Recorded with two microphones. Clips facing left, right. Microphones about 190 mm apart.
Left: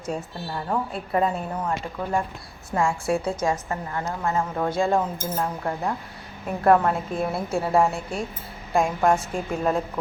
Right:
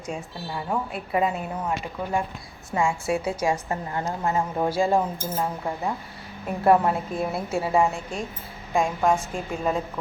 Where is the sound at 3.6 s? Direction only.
20° right (ahead or behind).